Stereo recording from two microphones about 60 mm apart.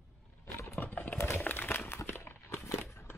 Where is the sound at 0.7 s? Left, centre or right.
Left.